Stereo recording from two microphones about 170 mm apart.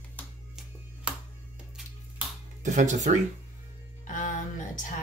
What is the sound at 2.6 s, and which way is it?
Speech, 45° right (ahead or behind).